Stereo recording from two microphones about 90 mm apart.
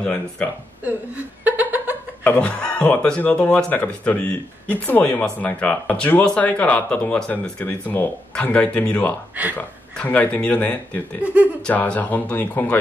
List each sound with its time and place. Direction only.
0.0 s speech: 15° left (ahead or behind)
0.8 s laughter: 20° right (ahead or behind)
2.2 s speech: 15° left (ahead or behind)